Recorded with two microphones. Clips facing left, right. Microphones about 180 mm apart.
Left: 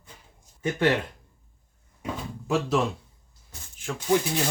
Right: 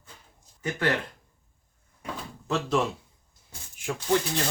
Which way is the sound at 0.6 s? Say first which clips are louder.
Left 4 dB; 25° left (ahead or behind).